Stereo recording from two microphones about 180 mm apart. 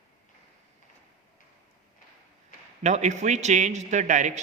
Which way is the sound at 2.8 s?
40° right (ahead or behind).